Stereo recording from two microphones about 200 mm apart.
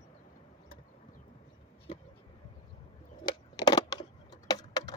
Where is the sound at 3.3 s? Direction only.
20° left (ahead or behind).